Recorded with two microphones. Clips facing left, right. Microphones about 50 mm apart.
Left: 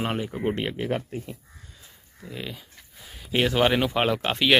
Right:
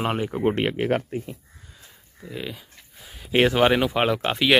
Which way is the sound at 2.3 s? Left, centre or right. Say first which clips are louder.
Right 3 dB; centre.